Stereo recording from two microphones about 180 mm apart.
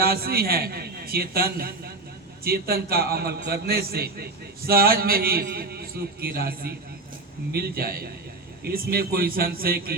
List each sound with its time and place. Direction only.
0.0 s a man's voice: 60° right (ahead or behind)